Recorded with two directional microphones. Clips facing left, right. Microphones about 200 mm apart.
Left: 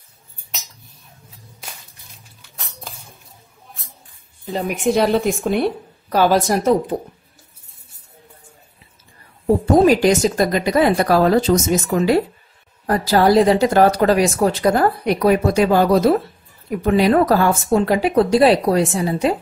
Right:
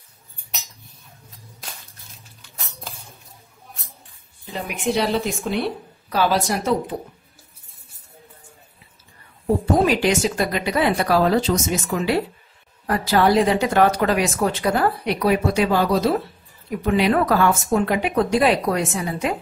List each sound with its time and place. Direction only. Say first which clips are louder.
4.5 s a woman's voice: left 5 dB; 40° left (ahead or behind)
9.8 s speech: left 5 dB; 40° left (ahead or behind)